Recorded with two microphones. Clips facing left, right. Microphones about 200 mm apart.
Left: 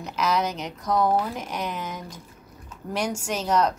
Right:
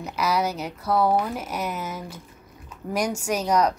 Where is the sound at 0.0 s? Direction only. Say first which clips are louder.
Right 1 dB; 10° right (ahead or behind).